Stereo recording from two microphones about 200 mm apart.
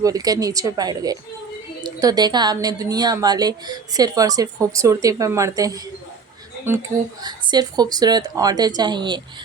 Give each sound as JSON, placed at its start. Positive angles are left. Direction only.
{"t": 0.0, "sound": "a woman's voice", "side_deg": -20}